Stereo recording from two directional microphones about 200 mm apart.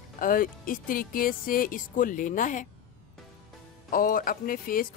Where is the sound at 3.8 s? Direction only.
45° left (ahead or behind).